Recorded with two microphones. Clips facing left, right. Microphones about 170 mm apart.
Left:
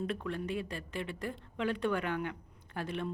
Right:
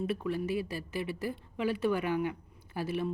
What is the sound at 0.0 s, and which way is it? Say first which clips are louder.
Speech: right 4 dB; 5° right (ahead or behind).